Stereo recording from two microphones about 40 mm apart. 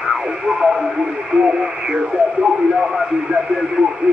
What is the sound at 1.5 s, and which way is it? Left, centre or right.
Speech, right.